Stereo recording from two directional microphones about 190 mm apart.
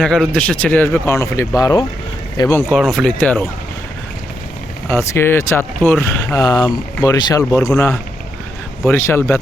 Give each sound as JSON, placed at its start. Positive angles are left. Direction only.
{"t": 0.0, "sound": "speech", "side_deg": 5}
{"t": 2.6, "sound": "speech", "side_deg": 0}
{"t": 4.9, "sound": "speech", "side_deg": 10}
{"t": 6.3, "sound": "speech", "side_deg": 20}
{"t": 8.9, "sound": "speech", "side_deg": 15}